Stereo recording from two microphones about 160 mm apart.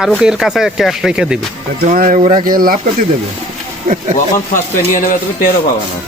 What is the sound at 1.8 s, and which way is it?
Speech, 60° right (ahead or behind).